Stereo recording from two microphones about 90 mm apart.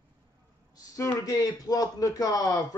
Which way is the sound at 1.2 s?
40° left (ahead or behind).